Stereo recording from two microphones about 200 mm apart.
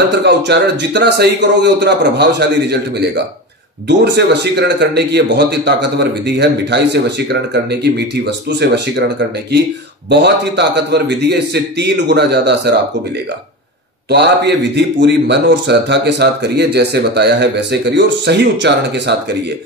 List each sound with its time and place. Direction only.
0.2 s speech: 55° right (ahead or behind)
8.5 s speech: 60° right (ahead or behind)
10.0 s speech: 60° right (ahead or behind)
14.1 s speech: 60° right (ahead or behind)